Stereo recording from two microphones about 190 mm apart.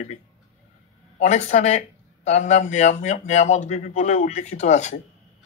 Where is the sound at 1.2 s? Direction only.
35° left (ahead or behind).